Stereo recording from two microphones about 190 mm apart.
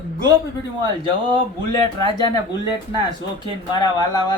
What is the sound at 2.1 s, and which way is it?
Speech, 20° left (ahead or behind).